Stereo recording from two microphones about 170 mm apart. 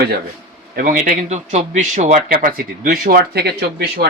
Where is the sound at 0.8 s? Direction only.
55° right (ahead or behind).